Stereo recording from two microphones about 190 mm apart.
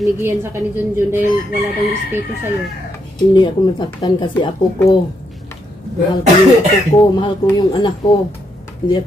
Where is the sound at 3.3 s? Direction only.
25° left (ahead or behind).